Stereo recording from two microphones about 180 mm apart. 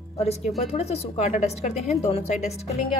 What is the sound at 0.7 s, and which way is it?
A woman's voice, 35° left (ahead or behind).